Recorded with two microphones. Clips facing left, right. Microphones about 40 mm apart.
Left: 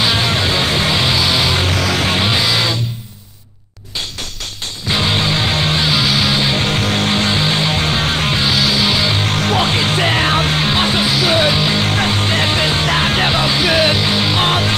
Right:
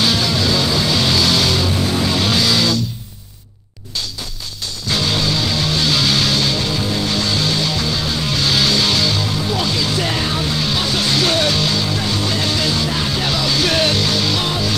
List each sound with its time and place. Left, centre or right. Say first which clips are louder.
0.3 s music: left 1 dB; left
1.0 s music: left 1 dB; centre
1.7 s music: left 2 dB; left
2.2 s music: left 1 dB; left
4.9 s music: left 2 dB; left
5.9 s music: left 2 dB; centre
6.5 s music: left 3 dB; left
8.5 s music: right 1 dB; centre
9.3 s music: left 4 dB; left
11.1 s music: left 2 dB; centre
11.3 s music: left 3 dB; left
11.8 s music: left 4 dB; left
13.6 s music: left 1 dB; centre
14.4 s music: left 5 dB; left